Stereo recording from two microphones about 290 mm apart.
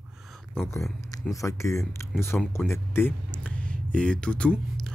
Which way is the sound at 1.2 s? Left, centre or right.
Centre.